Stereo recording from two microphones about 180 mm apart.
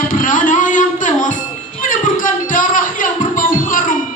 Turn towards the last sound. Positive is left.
turn(degrees=50)  # may be behind; listen again after turning